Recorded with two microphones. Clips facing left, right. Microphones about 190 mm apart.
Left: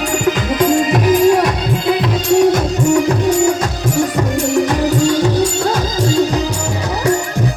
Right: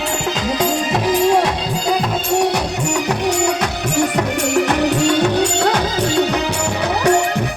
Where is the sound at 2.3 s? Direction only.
70° right (ahead or behind).